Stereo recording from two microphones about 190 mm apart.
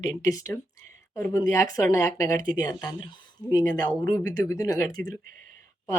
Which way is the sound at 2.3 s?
45° right (ahead or behind).